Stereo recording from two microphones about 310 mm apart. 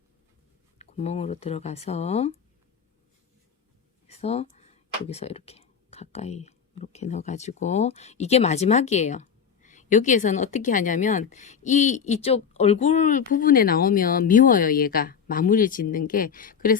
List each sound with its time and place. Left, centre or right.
0.8 s speech: left
4.1 s speech: centre